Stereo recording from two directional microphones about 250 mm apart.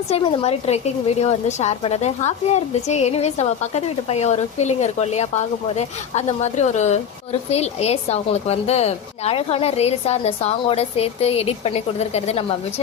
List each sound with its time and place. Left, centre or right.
0.1 s a woman's voice: left